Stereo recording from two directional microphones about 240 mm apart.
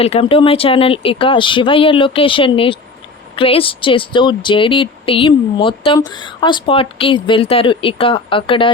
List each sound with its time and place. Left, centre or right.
0.0 s speech: left